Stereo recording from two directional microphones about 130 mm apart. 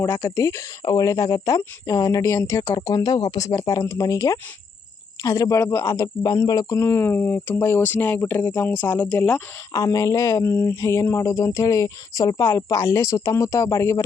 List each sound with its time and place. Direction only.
0.0 s speech: 25° left (ahead or behind)
9.7 s speech: 25° left (ahead or behind)